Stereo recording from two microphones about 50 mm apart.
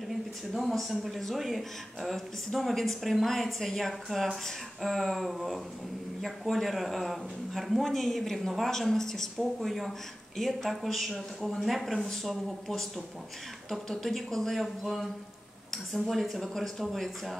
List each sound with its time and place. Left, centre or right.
0.1 s speech: centre